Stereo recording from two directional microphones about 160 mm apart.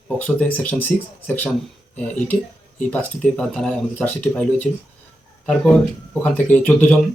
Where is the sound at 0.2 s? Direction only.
10° left (ahead or behind).